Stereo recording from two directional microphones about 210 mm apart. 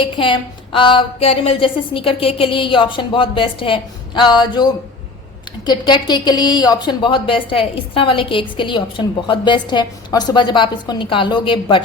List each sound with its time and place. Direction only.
0.0 s a woman's voice: 25° left (ahead or behind)